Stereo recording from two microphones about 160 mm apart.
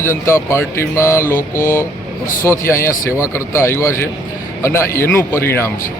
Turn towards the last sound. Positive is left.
turn(degrees=15)  # may be behind; listen again after turning